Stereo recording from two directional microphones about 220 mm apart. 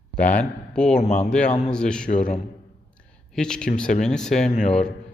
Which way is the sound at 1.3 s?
5° left (ahead or behind).